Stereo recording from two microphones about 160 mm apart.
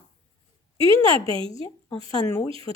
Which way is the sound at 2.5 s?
35° right (ahead or behind).